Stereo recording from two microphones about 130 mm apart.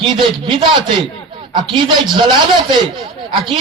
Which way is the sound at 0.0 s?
40° right (ahead or behind).